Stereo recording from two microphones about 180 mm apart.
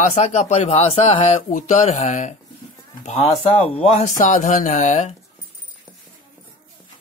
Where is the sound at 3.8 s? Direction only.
40° left (ahead or behind).